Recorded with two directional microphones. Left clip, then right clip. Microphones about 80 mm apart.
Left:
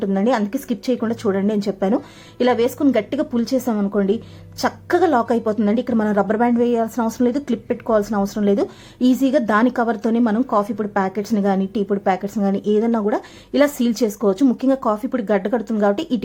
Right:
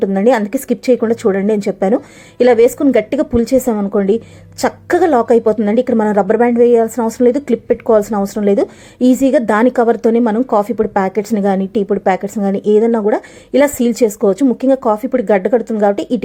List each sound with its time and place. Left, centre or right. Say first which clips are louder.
0.0 s a woman's voice: right 7 dB; right
7.4 s a woman's voice: right 9 dB; right
10.5 s a woman's voice: right 6 dB; right
15.4 s speech: right 6 dB; right